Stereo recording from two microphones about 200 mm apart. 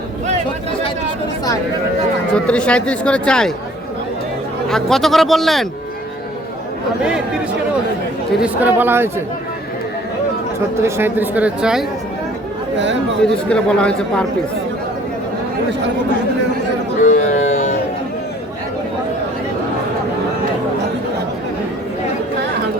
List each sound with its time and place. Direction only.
2.3 s speech: 5° left (ahead or behind)
4.7 s speech: centre (ahead or behind)
8.3 s speech: 5° right (ahead or behind)
10.8 s speech: 10° right (ahead or behind)
12.7 s speech: 60° right (ahead or behind)
13.5 s speech: 5° left (ahead or behind)
17.0 s speech: 40° left (ahead or behind)